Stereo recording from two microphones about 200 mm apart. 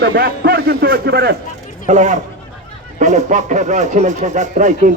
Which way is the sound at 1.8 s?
35° right (ahead or behind).